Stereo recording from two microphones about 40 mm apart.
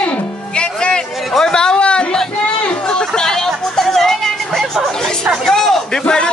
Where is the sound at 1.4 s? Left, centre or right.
Centre.